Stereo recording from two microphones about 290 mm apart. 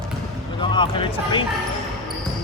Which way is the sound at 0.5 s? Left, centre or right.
Centre.